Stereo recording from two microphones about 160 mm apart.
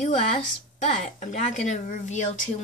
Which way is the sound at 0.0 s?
45° left (ahead or behind).